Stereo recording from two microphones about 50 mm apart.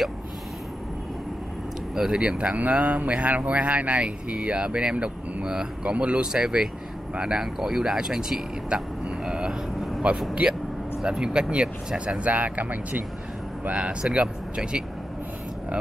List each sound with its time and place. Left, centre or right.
2.0 s speech: centre
2.2 s speech: right
6.3 s speech: centre
9.2 s vehicle: centre
10.1 s speech: right